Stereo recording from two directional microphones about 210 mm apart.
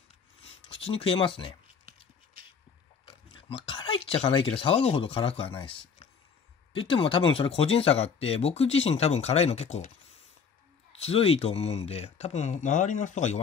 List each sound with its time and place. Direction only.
0.4 s a sound: 25° left (ahead or behind)
3.1 s speech: 25° left (ahead or behind)
11.0 s speech: 30° left (ahead or behind)